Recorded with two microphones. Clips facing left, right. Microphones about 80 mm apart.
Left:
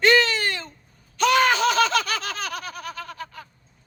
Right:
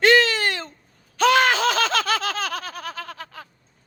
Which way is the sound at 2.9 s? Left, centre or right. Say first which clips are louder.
Even; right.